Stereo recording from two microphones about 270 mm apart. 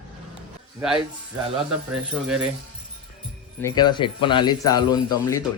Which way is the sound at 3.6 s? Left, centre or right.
Centre.